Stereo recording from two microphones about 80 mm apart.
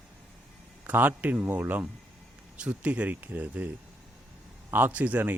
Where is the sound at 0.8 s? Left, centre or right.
Right.